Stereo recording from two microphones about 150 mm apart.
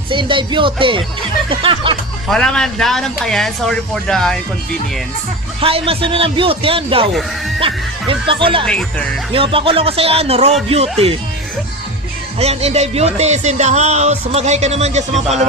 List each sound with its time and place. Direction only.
0.1 s speech: 35° right (ahead or behind)
2.3 s speech: 5° left (ahead or behind)
5.5 s speech: 40° right (ahead or behind)
12.4 s speech: 45° right (ahead or behind)